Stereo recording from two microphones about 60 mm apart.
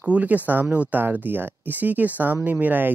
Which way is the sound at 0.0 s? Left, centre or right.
Right.